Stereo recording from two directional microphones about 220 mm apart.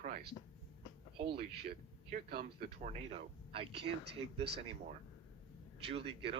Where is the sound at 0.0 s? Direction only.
35° right (ahead or behind).